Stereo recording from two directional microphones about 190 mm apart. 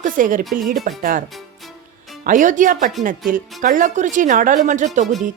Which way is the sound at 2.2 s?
45° right (ahead or behind).